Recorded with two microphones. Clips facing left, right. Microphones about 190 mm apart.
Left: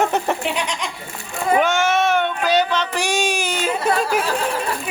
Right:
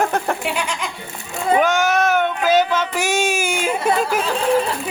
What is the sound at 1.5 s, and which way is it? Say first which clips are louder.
Child singing: right 1 dB; centre (ahead or behind).